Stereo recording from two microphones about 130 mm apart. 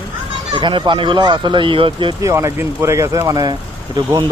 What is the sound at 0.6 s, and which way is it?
Speech, 35° right (ahead or behind).